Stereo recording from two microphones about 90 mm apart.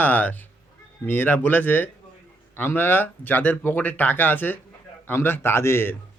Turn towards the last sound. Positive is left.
turn(degrees=30)  # may be behind; listen again after turning